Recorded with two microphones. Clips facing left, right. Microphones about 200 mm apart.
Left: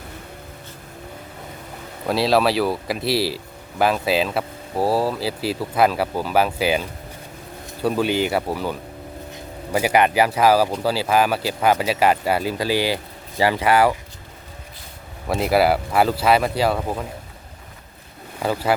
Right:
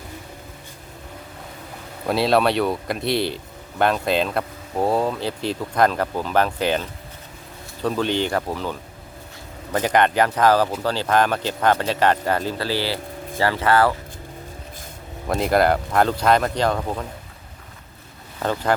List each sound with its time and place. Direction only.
2.0 s speech: centre (ahead or behind)
9.7 s speech: 10° left (ahead or behind)
15.3 s speech: 5° left (ahead or behind)
18.4 s speech: 15° left (ahead or behind)